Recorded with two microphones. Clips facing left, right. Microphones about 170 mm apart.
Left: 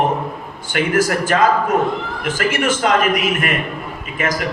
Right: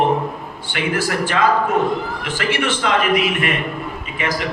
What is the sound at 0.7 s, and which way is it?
A man's voice, 45° left (ahead or behind).